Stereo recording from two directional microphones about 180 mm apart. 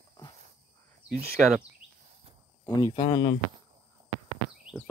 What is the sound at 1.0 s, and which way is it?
Speech, 55° right (ahead or behind).